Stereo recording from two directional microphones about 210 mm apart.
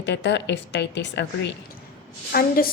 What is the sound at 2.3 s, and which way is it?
Speech, 45° left (ahead or behind).